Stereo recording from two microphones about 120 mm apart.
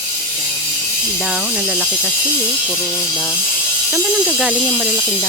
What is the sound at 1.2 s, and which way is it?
Speech, 10° right (ahead or behind).